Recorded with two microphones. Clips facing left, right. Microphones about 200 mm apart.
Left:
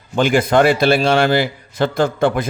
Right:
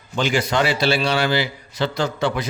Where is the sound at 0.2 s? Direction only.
50° left (ahead or behind).